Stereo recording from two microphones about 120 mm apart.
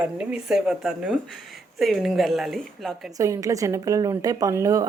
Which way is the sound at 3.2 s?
25° right (ahead or behind).